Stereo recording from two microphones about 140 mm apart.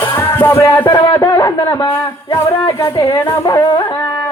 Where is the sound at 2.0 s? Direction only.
20° left (ahead or behind).